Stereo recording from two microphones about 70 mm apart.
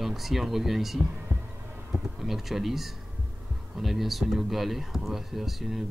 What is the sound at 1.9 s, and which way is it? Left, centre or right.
Speech, centre.